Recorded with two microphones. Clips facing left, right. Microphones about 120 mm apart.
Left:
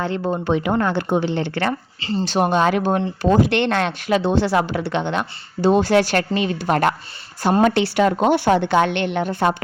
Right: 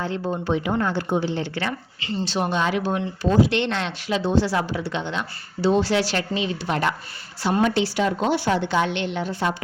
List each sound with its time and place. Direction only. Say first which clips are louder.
0.0 s speech: left 4 dB; 65° left (ahead or behind)